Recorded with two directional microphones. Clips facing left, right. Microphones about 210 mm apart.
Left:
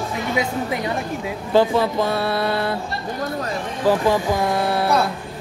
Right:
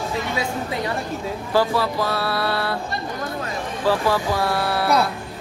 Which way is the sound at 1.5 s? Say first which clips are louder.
Left 4 dB; 20° left (ahead or behind).